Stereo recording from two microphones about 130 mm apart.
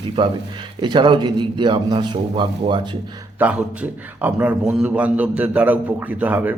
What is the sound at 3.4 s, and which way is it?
A man's voice, 10° right (ahead or behind).